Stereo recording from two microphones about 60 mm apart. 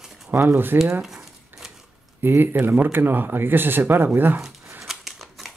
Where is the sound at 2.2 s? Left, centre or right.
Right.